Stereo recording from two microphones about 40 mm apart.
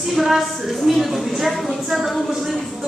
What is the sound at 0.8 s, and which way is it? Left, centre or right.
A woman's voice, centre.